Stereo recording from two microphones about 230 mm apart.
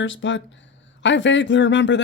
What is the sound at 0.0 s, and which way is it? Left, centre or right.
Speech, left.